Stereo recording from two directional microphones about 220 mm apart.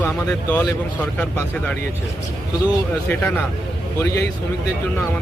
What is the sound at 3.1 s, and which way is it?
Speech, 10° left (ahead or behind).